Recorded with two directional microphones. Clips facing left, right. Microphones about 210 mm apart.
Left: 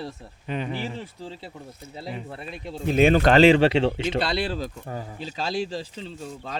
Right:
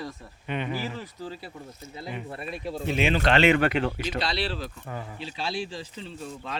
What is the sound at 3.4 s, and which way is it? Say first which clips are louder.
Speech: left 5 dB; 30° left (ahead or behind).